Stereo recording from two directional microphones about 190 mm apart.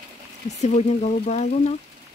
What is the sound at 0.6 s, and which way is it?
Speech, 35° left (ahead or behind).